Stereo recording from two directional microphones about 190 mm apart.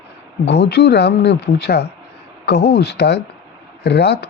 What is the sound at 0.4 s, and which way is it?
Speech, 60° left (ahead or behind).